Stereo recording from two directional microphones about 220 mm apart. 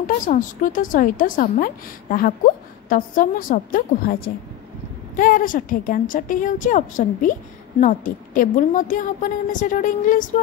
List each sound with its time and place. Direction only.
0.0 s a woman's voice: 35° left (ahead or behind)